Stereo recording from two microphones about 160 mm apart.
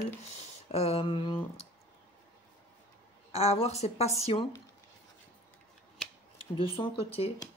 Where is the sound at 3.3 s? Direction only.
40° left (ahead or behind).